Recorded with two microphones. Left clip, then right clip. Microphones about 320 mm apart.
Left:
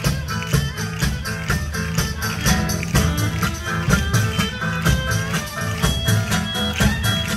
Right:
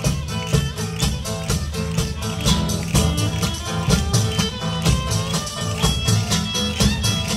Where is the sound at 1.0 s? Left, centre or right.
Centre.